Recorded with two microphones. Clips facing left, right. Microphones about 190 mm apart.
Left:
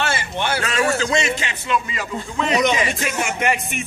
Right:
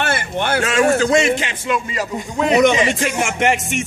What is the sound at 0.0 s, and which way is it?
A man's voice, 55° right (ahead or behind).